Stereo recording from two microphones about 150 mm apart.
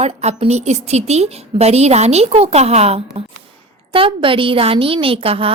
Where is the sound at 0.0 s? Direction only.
45° right (ahead or behind).